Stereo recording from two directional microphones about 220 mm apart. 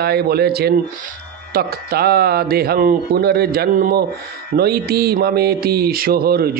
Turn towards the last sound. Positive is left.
turn(degrees=-45)  # may be behind; listen again after turning